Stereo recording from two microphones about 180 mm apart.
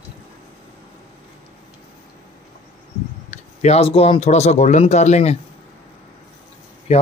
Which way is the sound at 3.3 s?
40° left (ahead or behind).